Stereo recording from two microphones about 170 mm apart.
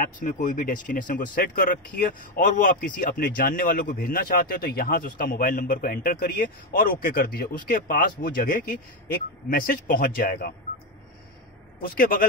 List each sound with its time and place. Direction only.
0.0 s speech: 50° left (ahead or behind)
11.8 s speech: 60° left (ahead or behind)